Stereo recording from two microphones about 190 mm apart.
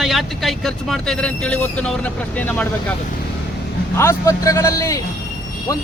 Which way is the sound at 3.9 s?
15° left (ahead or behind).